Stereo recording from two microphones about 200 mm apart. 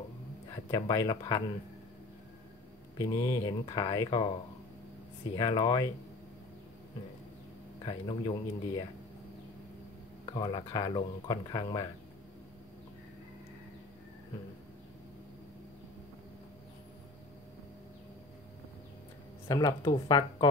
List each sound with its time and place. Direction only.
0.7 s speech: 20° left (ahead or behind)
3.0 s speech: 15° left (ahead or behind)
5.4 s speech: 20° left (ahead or behind)
7.8 s speech: 20° left (ahead or behind)
10.2 s speech: 25° left (ahead or behind)
19.4 s speech: 15° left (ahead or behind)